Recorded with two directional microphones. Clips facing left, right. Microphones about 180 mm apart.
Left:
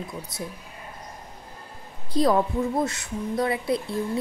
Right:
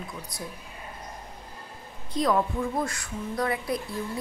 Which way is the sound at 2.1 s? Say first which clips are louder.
Left 4 dB; 35° left (ahead or behind).